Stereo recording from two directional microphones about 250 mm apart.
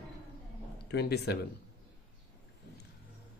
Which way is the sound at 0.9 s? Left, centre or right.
Left.